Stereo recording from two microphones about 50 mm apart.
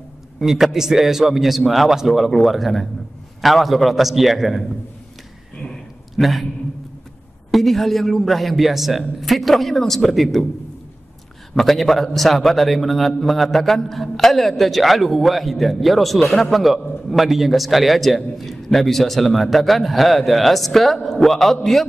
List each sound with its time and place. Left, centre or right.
0.4 s a man's voice: centre
5.6 s a sound: left
6.2 s a man's voice: centre
7.5 s a man's voice: centre
11.5 s a man's voice: centre